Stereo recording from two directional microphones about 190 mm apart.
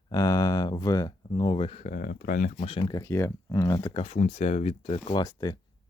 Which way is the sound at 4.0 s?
35° left (ahead or behind).